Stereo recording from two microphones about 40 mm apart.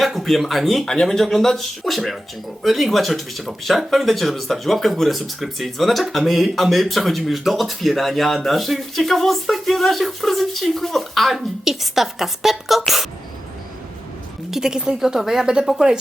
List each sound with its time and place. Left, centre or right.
0.0 s a woman's voice: centre
14.5 s a woman's voice: centre